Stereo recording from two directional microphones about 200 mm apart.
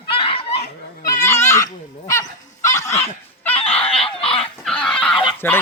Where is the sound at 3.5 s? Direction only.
30° left (ahead or behind).